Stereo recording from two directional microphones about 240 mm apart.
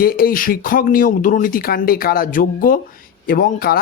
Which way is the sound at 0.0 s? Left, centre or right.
Left.